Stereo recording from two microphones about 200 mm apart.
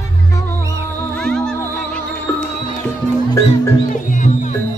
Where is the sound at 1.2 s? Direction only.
5° left (ahead or behind).